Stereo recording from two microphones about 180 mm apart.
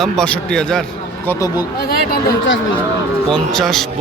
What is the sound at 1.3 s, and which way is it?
Speech, 20° left (ahead or behind).